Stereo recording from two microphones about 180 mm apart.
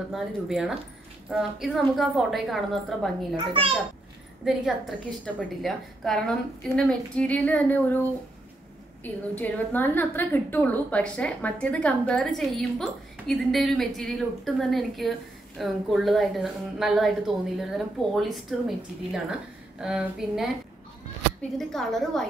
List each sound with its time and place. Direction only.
0.1 s a woman's voice: centre (ahead or behind)
3.3 s a child's voice: 30° right (ahead or behind)
4.5 s a woman's voice: centre (ahead or behind)
5.0 s a woman's voice: 10° left (ahead or behind)
9.4 s a woman's voice: 10° left (ahead or behind)
21.5 s a woman's voice: centre (ahead or behind)